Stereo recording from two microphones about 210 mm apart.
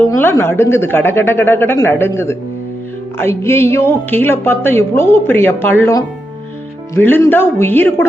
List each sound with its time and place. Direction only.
0.1 s a woman's voice: 15° left (ahead or behind)